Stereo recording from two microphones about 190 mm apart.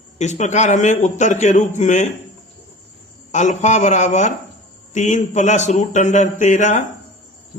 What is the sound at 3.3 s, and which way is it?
A man's voice, 40° left (ahead or behind).